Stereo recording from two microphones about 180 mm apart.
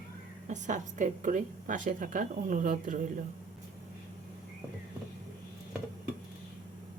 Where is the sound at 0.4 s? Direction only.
40° right (ahead or behind).